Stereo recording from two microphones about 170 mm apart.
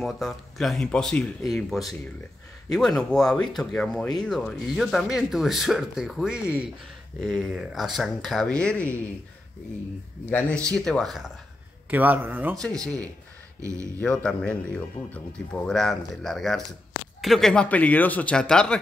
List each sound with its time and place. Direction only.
0.0 s speech: centre (ahead or behind)
10.3 s speech: 5° left (ahead or behind)
11.9 s speech: 10° right (ahead or behind)
13.6 s speech: 20° right (ahead or behind)
14.0 s speech: 5° left (ahead or behind)